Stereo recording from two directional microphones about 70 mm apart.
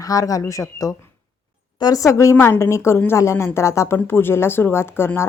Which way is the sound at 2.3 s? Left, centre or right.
Left.